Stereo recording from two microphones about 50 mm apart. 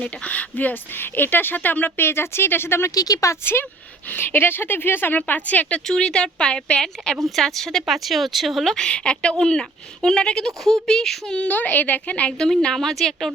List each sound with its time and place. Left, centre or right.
0.0 s a woman's voice: left
3.4 s a woman's voice: left
5.9 s speech: centre
8.8 s a woman's voice: centre
11.3 s a woman's voice: left
12.7 s speech: centre